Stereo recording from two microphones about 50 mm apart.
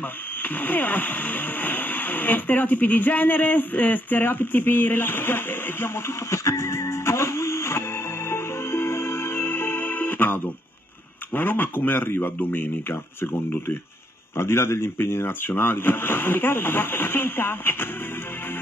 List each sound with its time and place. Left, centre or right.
0.4 s speech: left
6.3 s music: left
11.3 s speech: left
15.4 s speech: left